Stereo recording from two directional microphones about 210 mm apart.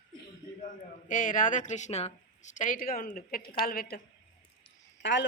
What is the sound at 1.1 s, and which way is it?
Speech, 40° left (ahead or behind).